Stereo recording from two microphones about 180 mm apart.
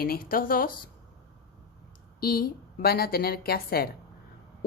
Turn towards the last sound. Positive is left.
turn(degrees=60)  # may be behind; listen again after turning